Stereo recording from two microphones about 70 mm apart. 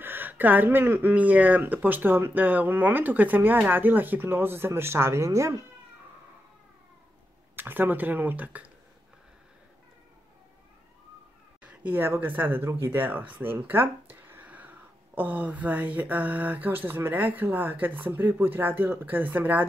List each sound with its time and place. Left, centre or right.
0.0 s speech: right
7.5 s speech: right
11.6 s a sound: centre
12.0 s speech: right